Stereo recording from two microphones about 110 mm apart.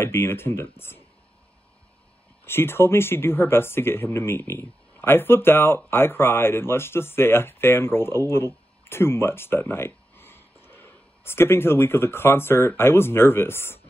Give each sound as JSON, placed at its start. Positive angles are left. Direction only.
{"t": 0.0, "sound": "speech", "side_deg": 25}
{"t": 2.4, "sound": "speech", "side_deg": 20}